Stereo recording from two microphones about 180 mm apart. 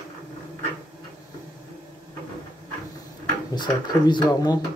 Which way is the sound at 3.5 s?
25° left (ahead or behind).